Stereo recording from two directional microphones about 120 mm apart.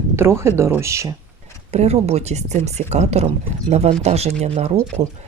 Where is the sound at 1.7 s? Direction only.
60° right (ahead or behind).